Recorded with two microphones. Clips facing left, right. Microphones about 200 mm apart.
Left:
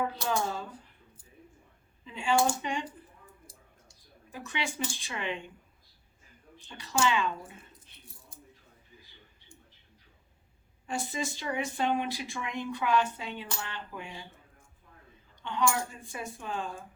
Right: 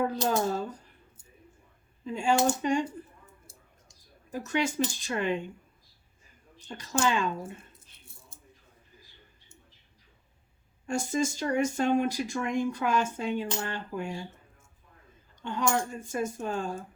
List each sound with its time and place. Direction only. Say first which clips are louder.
0.0 s speech: right 4 dB; 40° right (ahead or behind)
2.0 s speech: right 2 dB; 45° right (ahead or behind)
3.5 s a sound: even; 25° right (ahead or behind)
4.3 s speech: right 7 dB; 45° right (ahead or behind)
6.6 s speech: right 1 dB; 45° right (ahead or behind)
7.7 s squish: left 2 dB; 25° right (ahead or behind)
10.8 s speech: right 6 dB; 45° right (ahead or behind)
15.4 s speech: right 1 dB; 45° right (ahead or behind)